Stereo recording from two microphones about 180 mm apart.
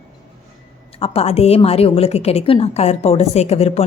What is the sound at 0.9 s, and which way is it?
A woman's voice, 35° left (ahead or behind).